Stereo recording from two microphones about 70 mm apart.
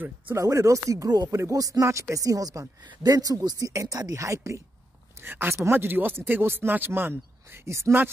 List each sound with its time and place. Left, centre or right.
0.4 s speech: right
3.0 s speech: right
4.1 s speech: right
5.2 s speech: right
7.6 s speech: right